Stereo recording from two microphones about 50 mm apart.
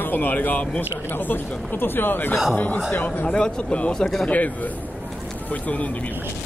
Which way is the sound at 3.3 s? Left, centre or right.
Centre.